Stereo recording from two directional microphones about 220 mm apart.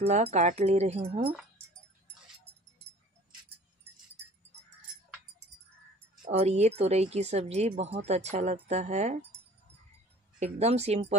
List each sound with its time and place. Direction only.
0.0 s speech: 30° right (ahead or behind)
6.3 s speech: 30° right (ahead or behind)
10.4 s speech: 30° right (ahead or behind)